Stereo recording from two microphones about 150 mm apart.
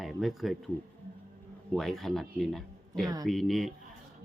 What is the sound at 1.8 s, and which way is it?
A man's voice, centre (ahead or behind).